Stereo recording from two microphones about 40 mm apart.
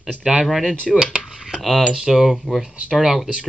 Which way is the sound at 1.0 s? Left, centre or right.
Centre.